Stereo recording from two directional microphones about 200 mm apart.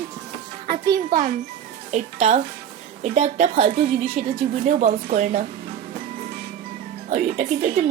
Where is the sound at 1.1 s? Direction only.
40° right (ahead or behind).